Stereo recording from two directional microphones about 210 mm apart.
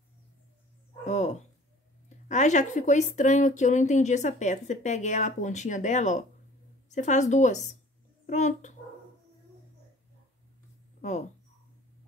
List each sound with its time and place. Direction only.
1.0 s speech: 35° left (ahead or behind)
11.0 s speech: 35° left (ahead or behind)